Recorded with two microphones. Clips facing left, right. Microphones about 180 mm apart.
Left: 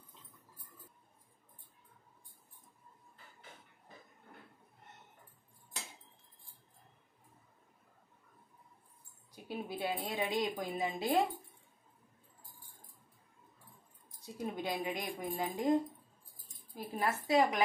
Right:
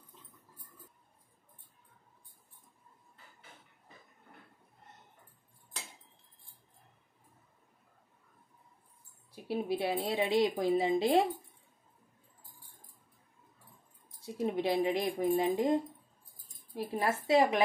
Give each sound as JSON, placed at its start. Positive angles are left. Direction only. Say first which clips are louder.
{"t": 9.3, "sound": "speech", "louder": "right 8 dB", "side_deg": -30}
{"t": 14.2, "sound": "speech", "louder": "right 7 dB", "side_deg": -25}